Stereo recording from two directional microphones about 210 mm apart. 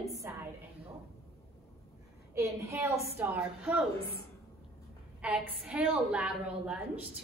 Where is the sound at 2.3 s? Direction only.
15° right (ahead or behind).